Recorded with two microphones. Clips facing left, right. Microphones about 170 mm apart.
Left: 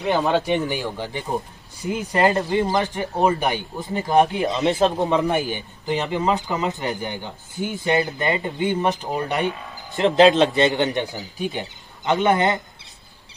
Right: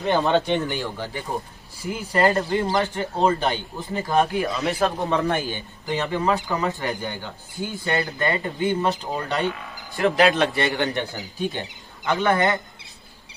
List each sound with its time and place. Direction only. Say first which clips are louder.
0.0 s speech: even; 5° left (ahead or behind)
0.6 s speech: left 2 dB; 15° left (ahead or behind)